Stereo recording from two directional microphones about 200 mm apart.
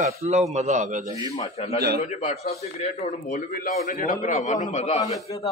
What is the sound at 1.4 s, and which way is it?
A man's voice, 30° left (ahead or behind).